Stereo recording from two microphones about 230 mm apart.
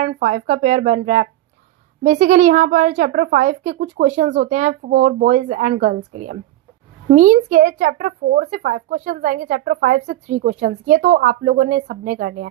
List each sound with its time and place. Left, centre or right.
0.0 s speech: right